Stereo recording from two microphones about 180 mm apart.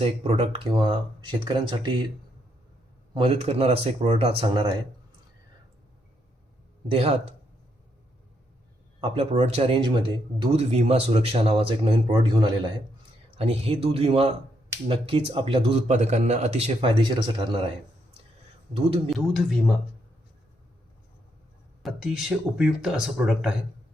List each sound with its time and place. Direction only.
0.0 s speech: 35° right (ahead or behind)
3.2 s a man's voice: 30° right (ahead or behind)
6.9 s a man's voice: 35° right (ahead or behind)
9.0 s a man's voice: 35° right (ahead or behind)
19.1 s speech: centre (ahead or behind)
21.8 s speech: 5° right (ahead or behind)